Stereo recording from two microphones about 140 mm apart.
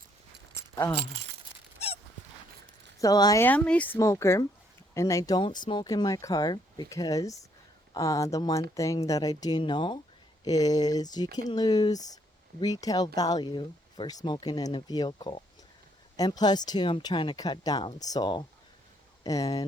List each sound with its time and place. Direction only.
3.0 s speech: 25° left (ahead or behind)
3.4 s speech: 10° left (ahead or behind)
3.9 s speech: 20° left (ahead or behind)
5.4 s speech: 35° left (ahead or behind)